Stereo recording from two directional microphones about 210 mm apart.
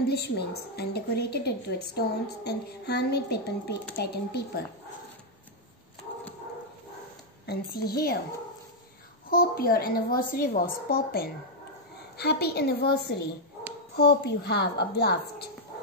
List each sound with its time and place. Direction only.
0.1 s a woman's voice: 50° left (ahead or behind)
7.4 s a woman's voice: 45° left (ahead or behind)
9.3 s a woman's voice: 45° left (ahead or behind)